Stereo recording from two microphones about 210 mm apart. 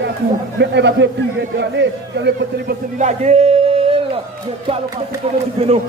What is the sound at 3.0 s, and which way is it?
Speech, 35° right (ahead or behind).